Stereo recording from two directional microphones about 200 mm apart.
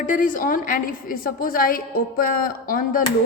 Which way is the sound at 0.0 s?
40° left (ahead or behind).